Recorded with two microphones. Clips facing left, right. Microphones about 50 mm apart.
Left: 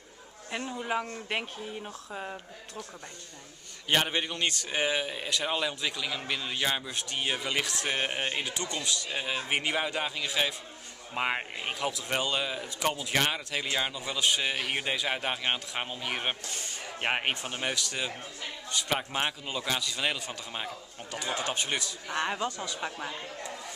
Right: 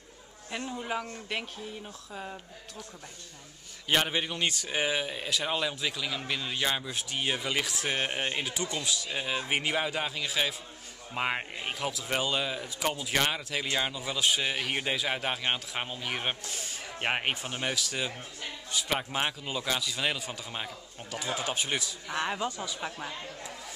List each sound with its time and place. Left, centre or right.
0.5 s speech: centre
3.9 s speech: centre